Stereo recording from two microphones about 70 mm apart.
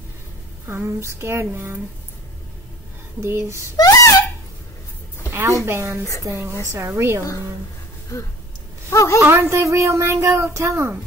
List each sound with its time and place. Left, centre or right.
0.7 s speech: right
3.2 s speech: right
3.7 s wail: left
5.7 s speech: right
8.9 s a woman's voice: left
9.2 s speech: right